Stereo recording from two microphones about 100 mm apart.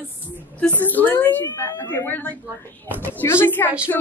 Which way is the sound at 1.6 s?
35° left (ahead or behind).